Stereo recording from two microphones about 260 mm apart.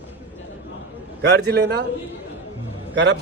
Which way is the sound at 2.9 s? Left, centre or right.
Right.